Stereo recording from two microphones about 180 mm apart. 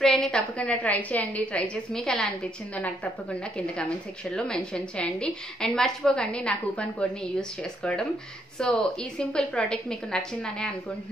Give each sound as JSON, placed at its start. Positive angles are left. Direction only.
{"t": 0.0, "sound": "a woman's voice", "side_deg": 0}